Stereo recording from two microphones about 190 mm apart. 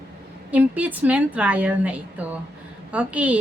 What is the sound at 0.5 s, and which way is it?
A woman's voice, 10° right (ahead or behind).